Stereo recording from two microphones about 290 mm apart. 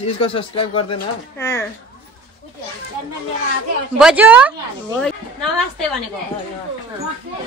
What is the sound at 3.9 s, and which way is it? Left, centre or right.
Speech, centre.